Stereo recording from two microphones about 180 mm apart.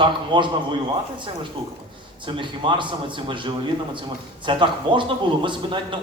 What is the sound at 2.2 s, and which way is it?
A man's voice, 25° right (ahead or behind).